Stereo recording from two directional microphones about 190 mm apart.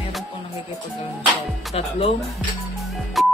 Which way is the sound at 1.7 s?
30° left (ahead or behind).